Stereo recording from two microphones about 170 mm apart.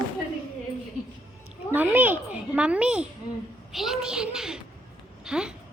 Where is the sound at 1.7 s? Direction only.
10° right (ahead or behind).